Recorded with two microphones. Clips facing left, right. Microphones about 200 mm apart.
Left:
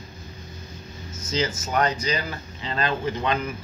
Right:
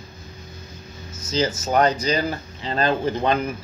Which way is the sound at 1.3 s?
35° right (ahead or behind).